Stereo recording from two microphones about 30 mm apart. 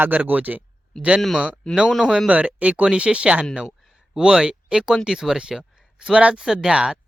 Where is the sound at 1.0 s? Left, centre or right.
Right.